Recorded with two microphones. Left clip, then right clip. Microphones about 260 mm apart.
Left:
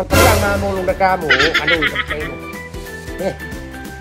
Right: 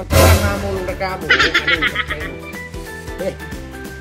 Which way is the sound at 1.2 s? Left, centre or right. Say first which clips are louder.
Even; centre.